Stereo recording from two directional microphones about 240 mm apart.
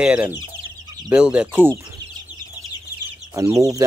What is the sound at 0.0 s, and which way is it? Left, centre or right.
Speech, centre.